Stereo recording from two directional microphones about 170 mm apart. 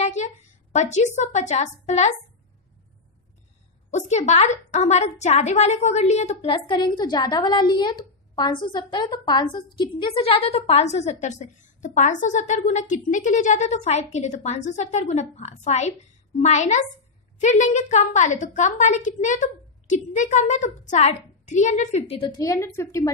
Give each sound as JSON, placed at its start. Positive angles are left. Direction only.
{"t": 0.0, "sound": "a woman's voice", "side_deg": 40}
{"t": 3.9, "sound": "a woman's voice", "side_deg": 40}
{"t": 22.1, "sound": "a woman's voice", "side_deg": 30}
{"t": 22.4, "sound": "a woman's voice", "side_deg": 20}